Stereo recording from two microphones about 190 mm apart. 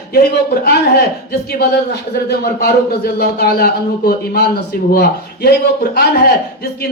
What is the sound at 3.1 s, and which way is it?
Speech, 55° left (ahead or behind).